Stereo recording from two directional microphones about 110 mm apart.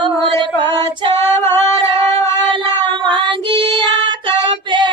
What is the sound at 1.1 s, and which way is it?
Female singing, 25° left (ahead or behind).